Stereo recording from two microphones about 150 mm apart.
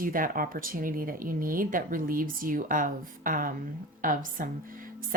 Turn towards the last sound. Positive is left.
turn(degrees=-70)  # may be behind; listen again after turning